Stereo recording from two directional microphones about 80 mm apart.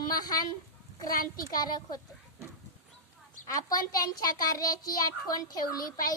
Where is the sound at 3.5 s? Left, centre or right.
Left.